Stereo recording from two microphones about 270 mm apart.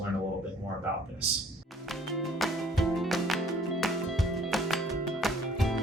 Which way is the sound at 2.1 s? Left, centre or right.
Centre.